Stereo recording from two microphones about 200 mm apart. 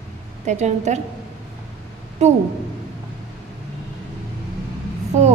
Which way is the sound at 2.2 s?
35° right (ahead or behind).